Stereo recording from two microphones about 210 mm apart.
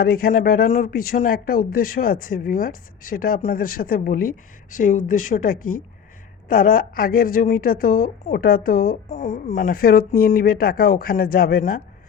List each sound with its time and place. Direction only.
0.0 s a woman's voice: 45° left (ahead or behind)